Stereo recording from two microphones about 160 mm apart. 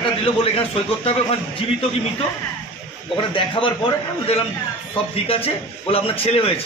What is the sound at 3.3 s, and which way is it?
A man's voice, 30° left (ahead or behind).